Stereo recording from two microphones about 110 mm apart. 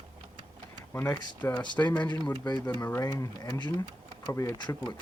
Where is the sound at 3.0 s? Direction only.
30° left (ahead or behind).